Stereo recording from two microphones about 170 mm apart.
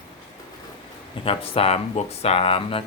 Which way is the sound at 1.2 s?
35° left (ahead or behind).